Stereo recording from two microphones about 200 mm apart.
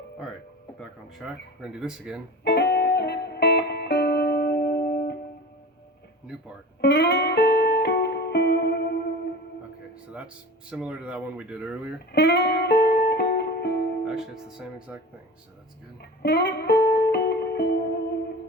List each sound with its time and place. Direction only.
0.8 s speech: centre (ahead or behind)
2.4 s music: 55° left (ahead or behind)
6.8 s music: 55° left (ahead or behind)
10.7 s speech: 5° right (ahead or behind)
12.1 s music: 55° left (ahead or behind)
14.0 s speech: centre (ahead or behind)
16.2 s music: 60° left (ahead or behind)